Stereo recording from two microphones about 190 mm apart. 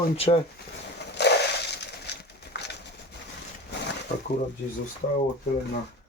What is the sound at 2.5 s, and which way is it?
Pigeon, 60° left (ahead or behind).